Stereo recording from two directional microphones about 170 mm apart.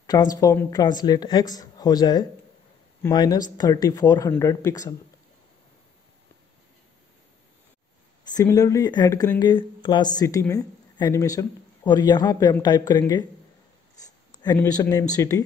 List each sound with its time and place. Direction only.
0.0 s speech: 20° left (ahead or behind)
8.3 s speech: 20° left (ahead or behind)
14.4 s speech: 25° left (ahead or behind)